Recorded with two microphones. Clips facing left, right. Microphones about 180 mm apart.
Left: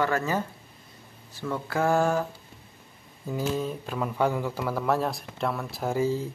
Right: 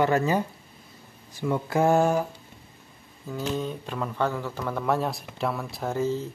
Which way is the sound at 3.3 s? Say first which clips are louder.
Left 1 dB; 5° left (ahead or behind).